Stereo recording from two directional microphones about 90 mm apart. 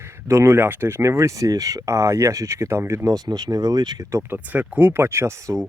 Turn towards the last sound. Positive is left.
turn(degrees=-35)  # may be behind; listen again after turning